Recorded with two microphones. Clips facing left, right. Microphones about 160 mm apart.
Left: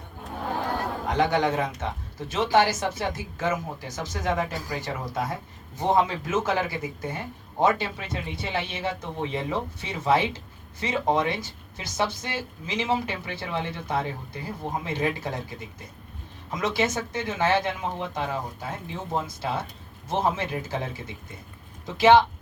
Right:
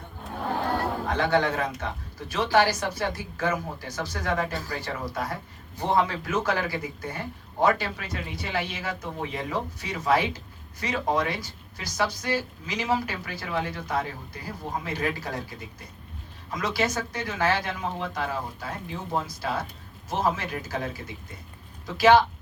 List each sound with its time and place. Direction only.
1.0 s speech: 15° left (ahead or behind)
19.4 s speech: 25° left (ahead or behind)